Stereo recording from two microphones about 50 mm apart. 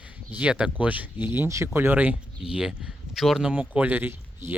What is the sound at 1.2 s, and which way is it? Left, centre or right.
Speech, right.